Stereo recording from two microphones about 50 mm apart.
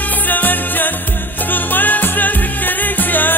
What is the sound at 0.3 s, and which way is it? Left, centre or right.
Music, left.